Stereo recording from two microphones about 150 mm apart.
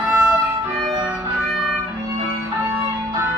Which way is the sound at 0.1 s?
5° right (ahead or behind).